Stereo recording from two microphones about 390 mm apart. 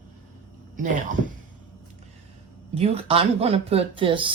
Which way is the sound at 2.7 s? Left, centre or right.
Centre.